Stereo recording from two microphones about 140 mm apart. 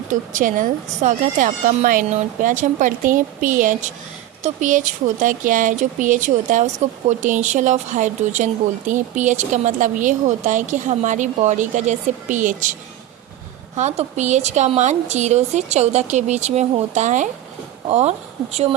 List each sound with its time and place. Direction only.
0.1 s a woman's voice: 70° right (ahead or behind)
13.7 s a woman's voice: 55° right (ahead or behind)